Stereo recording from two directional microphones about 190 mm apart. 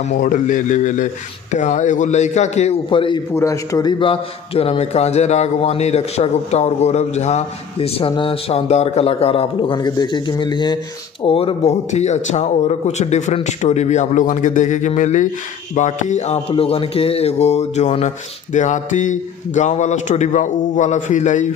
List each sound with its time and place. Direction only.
0.1 s a man's voice: 45° left (ahead or behind); by 3.2 s 30° left (ahead or behind)
3.3 s a man's voice: 15° left (ahead or behind); by 21.5 s 40° left (ahead or behind)